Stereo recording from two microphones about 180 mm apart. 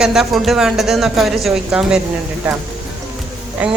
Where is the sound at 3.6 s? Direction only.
10° right (ahead or behind).